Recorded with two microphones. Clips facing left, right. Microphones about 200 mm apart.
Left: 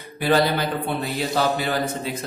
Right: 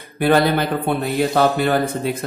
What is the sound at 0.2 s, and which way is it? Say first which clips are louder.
A man's voice: right 4 dB; 55° right (ahead or behind).